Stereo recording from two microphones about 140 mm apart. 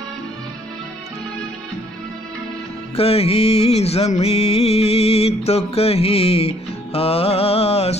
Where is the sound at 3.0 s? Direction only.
45° left (ahead or behind).